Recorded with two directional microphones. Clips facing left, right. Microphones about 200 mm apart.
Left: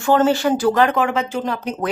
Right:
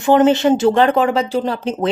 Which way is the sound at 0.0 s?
20° right (ahead or behind).